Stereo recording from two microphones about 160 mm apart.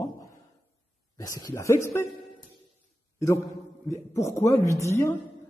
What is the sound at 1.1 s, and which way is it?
Speech, 20° left (ahead or behind).